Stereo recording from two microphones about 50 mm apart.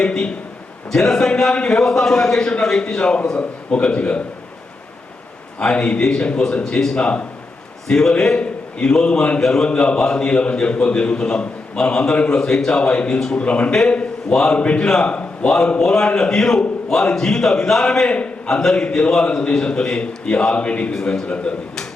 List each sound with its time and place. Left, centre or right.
0.0 s a man's voice: centre
5.5 s a man's voice: centre
7.0 s a man's voice: left
7.9 s a man's voice: centre
12.4 s a man's voice: centre
13.1 s a man's voice: centre
13.4 s a man's voice: left
20.9 s a man's voice: centre